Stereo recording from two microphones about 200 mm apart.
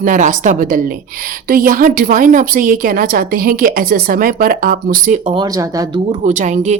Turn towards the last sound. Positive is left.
turn(degrees=-35)  # may be behind; listen again after turning